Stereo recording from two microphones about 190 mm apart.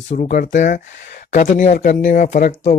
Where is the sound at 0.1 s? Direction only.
40° left (ahead or behind).